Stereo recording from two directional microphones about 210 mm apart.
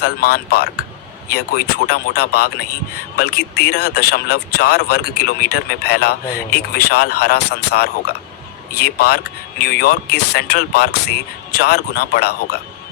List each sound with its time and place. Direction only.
0.0 s a man's voice: 45° left (ahead or behind)